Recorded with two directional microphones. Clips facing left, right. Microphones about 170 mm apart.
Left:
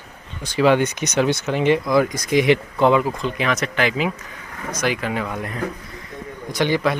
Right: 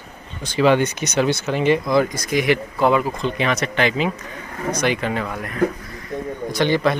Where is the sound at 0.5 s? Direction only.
10° left (ahead or behind).